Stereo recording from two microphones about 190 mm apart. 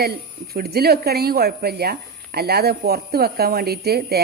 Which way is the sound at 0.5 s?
55° right (ahead or behind).